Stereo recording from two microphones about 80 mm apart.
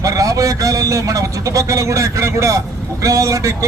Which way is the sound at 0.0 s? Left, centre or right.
Right.